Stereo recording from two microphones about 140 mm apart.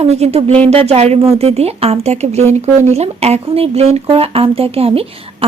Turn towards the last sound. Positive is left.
turn(degrees=-45)  # may be behind; listen again after turning